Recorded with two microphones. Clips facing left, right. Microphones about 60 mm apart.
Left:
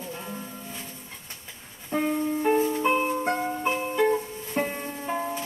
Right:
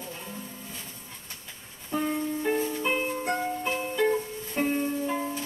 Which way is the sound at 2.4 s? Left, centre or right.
Centre.